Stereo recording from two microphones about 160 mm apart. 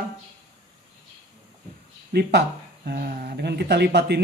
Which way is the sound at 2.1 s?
90° right.